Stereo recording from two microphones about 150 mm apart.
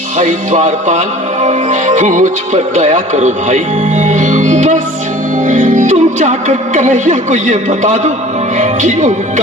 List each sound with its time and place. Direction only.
0.2 s music: 55° right (ahead or behind)
8.5 s speech: 55° right (ahead or behind)